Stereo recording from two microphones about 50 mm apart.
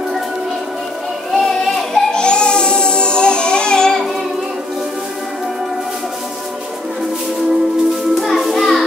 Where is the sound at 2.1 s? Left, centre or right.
Centre.